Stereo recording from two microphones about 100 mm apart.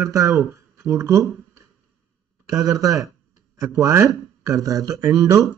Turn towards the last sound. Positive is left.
turn(degrees=-30)  # may be behind; listen again after turning